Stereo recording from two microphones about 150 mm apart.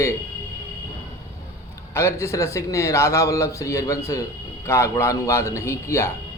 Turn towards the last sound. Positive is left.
turn(degrees=20)  # may be behind; listen again after turning